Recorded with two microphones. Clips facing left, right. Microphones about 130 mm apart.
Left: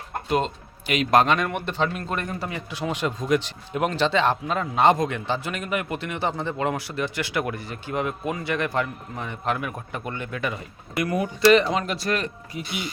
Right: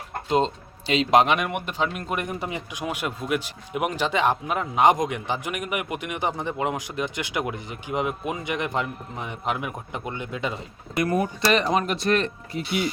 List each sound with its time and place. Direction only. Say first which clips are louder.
0.3 s speech: right 2 dB; 25° right (ahead or behind)